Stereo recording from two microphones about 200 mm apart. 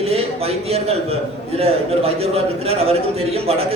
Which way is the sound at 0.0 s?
30° right (ahead or behind).